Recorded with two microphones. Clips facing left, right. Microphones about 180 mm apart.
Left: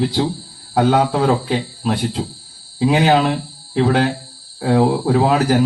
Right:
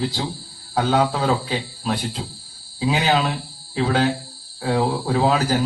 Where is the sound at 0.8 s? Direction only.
50° left (ahead or behind).